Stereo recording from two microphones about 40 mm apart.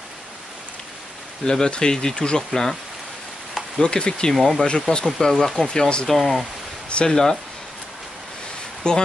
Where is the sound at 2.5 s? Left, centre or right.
Centre.